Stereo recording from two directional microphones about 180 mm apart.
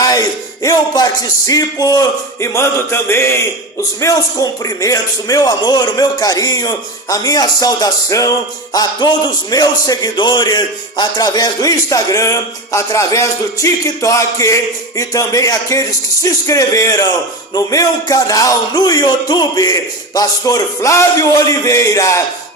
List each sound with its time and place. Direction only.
0.0 s music: 20° left (ahead or behind)
4.0 s a man's voice: 20° left (ahead or behind)